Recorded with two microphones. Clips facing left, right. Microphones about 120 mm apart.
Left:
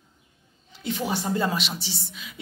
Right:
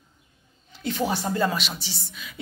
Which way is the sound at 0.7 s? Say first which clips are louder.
Right 2 dB; 15° left (ahead or behind).